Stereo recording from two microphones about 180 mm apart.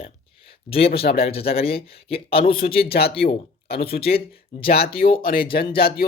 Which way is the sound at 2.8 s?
60° left (ahead or behind).